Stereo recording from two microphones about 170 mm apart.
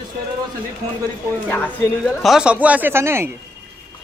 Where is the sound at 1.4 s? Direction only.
10° left (ahead or behind); by 3.3 s 15° right (ahead or behind).